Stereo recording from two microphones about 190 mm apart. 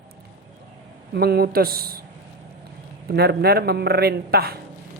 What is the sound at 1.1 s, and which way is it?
Speech, 55° right (ahead or behind).